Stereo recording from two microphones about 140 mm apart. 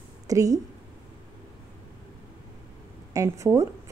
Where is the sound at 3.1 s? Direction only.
20° right (ahead or behind).